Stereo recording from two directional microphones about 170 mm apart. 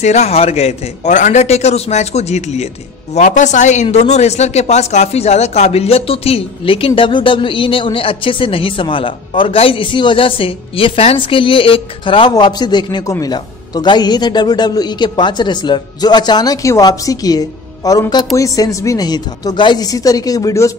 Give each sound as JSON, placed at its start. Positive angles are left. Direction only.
{"t": 0.0, "sound": "speech", "side_deg": 40}